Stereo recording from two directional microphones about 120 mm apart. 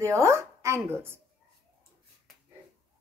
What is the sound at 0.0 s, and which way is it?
Speech, 25° right (ahead or behind).